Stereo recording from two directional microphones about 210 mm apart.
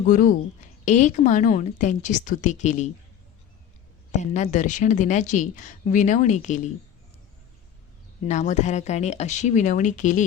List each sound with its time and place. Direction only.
0.1 s a woman's voice: 40° left (ahead or behind)
4.1 s a woman's voice: 35° left (ahead or behind)
8.2 s a woman's voice: 35° left (ahead or behind)